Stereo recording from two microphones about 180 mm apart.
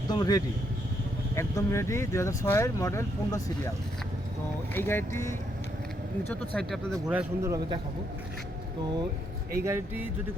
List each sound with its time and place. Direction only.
0.1 s speech: 20° left (ahead or behind)
4.7 s speech: 10° left (ahead or behind)
7.1 s a man's voice: 10° right (ahead or behind)
9.6 s a man's voice: 10° right (ahead or behind)